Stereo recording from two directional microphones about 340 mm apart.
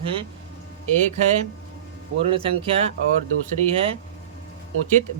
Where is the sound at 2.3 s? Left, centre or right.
Centre.